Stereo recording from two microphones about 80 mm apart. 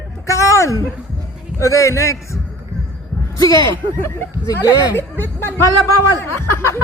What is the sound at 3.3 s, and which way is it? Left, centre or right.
Speech, left.